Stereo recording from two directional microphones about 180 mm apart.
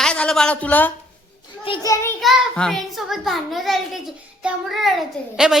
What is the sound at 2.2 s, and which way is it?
A woman's voice, centre (ahead or behind).